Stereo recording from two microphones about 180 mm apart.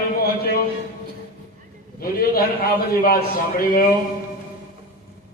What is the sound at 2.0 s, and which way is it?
A man's voice, 55° left (ahead or behind).